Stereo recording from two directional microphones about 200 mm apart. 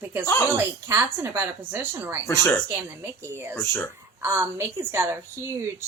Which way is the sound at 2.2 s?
15° left (ahead or behind).